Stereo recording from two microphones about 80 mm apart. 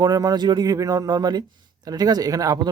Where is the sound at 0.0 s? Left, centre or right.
Right.